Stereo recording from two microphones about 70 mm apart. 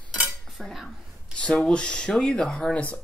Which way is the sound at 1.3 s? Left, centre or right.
Centre.